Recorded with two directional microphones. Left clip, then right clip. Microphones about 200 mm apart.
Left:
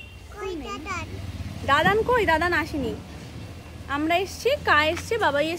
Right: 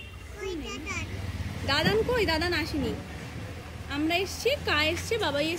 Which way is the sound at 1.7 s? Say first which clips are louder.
Left 6 dB; 5° right (ahead or behind).